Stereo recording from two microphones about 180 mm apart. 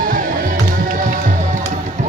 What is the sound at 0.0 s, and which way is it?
Music, 50° right (ahead or behind).